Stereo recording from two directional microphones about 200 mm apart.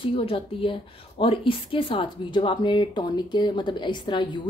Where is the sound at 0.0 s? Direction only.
30° left (ahead or behind).